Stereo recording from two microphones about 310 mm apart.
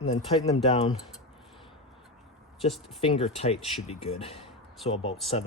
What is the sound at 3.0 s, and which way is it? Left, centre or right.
Speech, centre.